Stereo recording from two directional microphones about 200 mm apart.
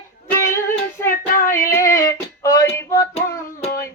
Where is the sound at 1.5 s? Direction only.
15° left (ahead or behind).